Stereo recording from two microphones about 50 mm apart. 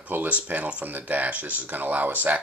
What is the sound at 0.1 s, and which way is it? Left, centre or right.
Speech, right.